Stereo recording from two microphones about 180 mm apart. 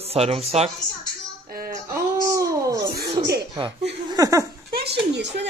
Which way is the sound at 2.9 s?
65° right (ahead or behind).